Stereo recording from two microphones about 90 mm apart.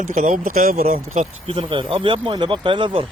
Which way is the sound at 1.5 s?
80° right.